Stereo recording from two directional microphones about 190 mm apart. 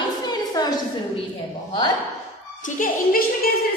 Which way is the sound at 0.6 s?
20° left (ahead or behind).